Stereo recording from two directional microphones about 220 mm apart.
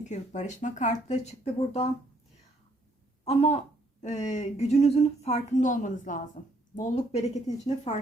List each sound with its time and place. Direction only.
0.0 s speech: 30° left (ahead or behind)
3.2 s a woman's voice: 30° left (ahead or behind)